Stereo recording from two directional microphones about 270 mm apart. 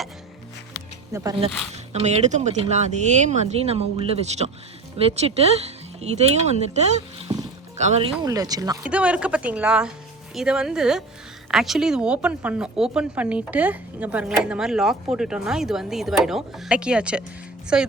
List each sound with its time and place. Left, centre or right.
0.7 s music: centre
1.7 s speech: right
8.2 s a woman's voice: centre